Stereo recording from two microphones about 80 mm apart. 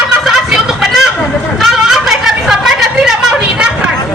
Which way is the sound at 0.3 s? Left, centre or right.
Centre.